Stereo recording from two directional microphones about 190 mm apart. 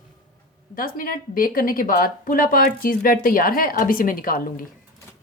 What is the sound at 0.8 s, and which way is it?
A woman's voice, 50° left (ahead or behind).